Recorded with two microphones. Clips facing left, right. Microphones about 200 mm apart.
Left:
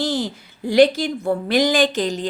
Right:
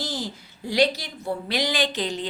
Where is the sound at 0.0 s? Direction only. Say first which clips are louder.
Left 9 dB; 60° left (ahead or behind).